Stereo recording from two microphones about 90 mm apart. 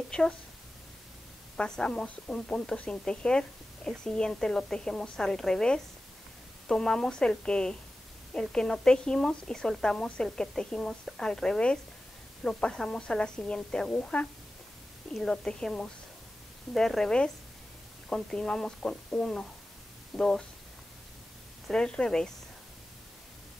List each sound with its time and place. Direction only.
1.6 s speech: 10° left (ahead or behind)
21.6 s speech: 10° left (ahead or behind)